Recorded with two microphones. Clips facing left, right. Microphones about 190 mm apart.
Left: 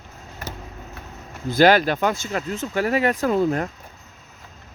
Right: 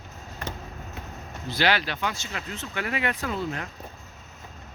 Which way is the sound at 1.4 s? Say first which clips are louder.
Left 10 dB; 45° left (ahead or behind).